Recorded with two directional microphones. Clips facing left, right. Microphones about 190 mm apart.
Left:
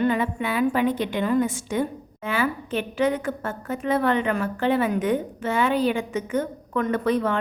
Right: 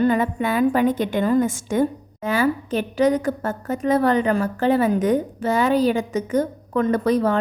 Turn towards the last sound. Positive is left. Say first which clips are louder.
# right 4 dB
turn(degrees=-40)  # may be behind; listen again after turning